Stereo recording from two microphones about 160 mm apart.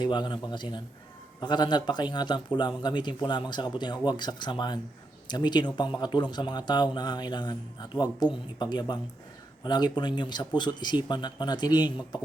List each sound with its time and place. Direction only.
0.0 s a man's voice: 30° left (ahead or behind)